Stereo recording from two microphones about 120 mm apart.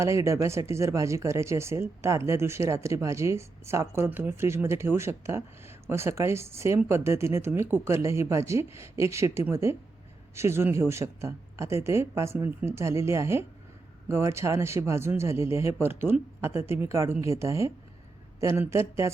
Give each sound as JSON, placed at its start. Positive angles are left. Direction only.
{"t": 0.0, "sound": "speech", "side_deg": -25}